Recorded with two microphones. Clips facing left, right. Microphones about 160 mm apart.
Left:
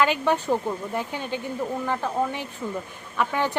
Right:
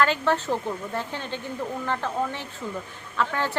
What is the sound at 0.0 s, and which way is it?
A woman's voice, 15° left (ahead or behind).